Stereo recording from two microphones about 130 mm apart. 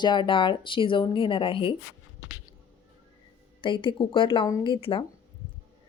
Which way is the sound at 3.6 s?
40° left (ahead or behind).